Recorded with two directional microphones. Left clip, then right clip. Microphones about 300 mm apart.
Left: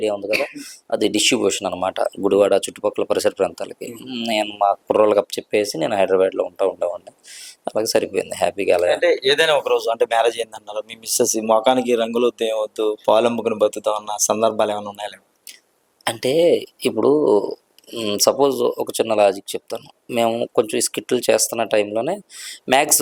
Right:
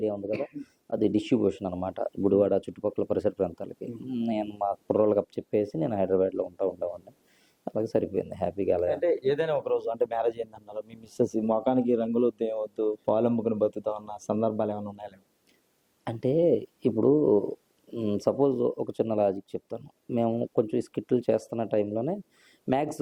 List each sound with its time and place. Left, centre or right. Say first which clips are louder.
0.3 s speech: left 11 dB; centre
16.0 s speech: left 8 dB; centre
17.1 s speech: left 7 dB; left
17.9 s speech: left 9 dB; centre